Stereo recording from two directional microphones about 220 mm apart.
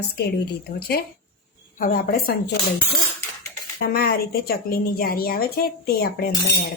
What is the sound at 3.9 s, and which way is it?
A woman's voice, 45° left (ahead or behind).